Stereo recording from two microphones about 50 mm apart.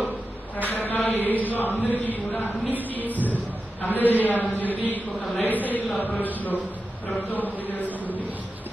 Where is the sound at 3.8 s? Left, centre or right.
Left.